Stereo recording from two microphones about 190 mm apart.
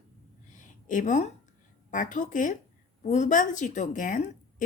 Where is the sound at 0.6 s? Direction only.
45° left (ahead or behind).